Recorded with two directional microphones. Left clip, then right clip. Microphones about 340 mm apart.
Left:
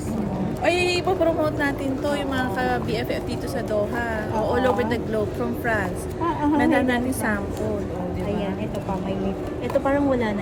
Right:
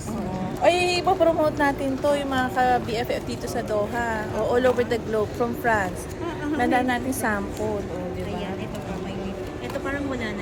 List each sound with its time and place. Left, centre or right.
0.6 s speech: centre
4.4 s speech: centre
6.6 s speech: centre
9.8 s speech: centre